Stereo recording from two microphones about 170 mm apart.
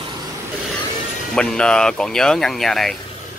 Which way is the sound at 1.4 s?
5° left (ahead or behind).